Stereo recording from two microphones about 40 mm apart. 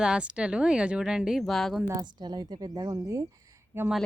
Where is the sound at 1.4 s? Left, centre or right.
Centre.